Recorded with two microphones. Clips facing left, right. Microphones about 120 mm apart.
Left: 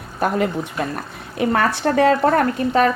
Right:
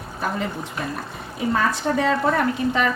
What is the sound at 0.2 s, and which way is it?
A woman's voice, 65° left (ahead or behind).